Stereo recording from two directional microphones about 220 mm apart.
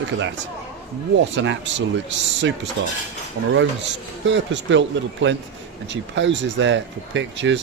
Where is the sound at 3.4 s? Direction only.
90° right.